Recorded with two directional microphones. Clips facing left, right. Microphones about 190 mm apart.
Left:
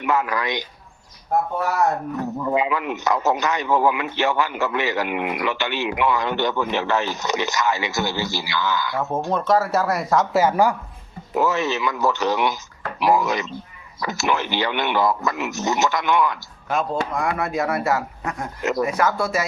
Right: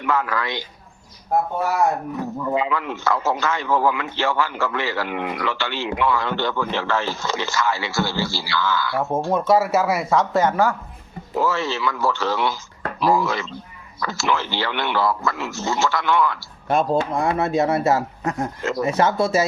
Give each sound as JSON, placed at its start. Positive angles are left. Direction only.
{"t": 0.0, "sound": "speech", "side_deg": 20}
{"t": 1.5, "sound": "speech", "side_deg": -10}
{"t": 2.4, "sound": "a man's voice", "side_deg": 10}
{"t": 9.0, "sound": "a man's voice", "side_deg": -10}
{"t": 16.7, "sound": "speech", "side_deg": -30}